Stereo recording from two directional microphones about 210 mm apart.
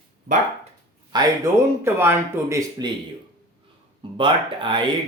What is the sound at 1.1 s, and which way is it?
Speech, 15° right (ahead or behind).